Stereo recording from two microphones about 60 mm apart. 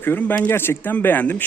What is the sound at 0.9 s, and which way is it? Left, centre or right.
Speech, left.